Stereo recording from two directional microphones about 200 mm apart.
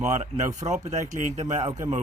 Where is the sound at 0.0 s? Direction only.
35° right (ahead or behind).